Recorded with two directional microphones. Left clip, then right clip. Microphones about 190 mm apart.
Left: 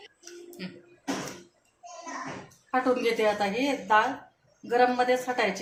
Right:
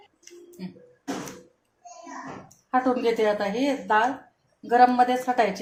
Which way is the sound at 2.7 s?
45° right (ahead or behind).